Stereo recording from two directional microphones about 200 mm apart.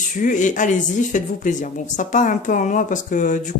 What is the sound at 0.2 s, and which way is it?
A woman's voice, 40° left (ahead or behind).